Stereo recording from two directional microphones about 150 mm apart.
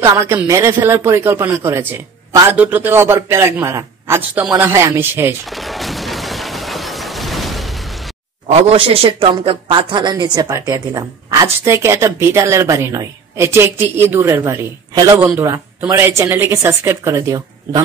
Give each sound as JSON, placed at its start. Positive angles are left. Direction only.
{"t": 0.0, "sound": "a man's voice", "side_deg": -20}
{"t": 5.5, "sound": "a sound", "side_deg": 0}
{"t": 8.5, "sound": "a man's voice", "side_deg": -45}